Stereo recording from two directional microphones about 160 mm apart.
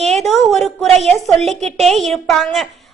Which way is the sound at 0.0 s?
Centre (ahead or behind).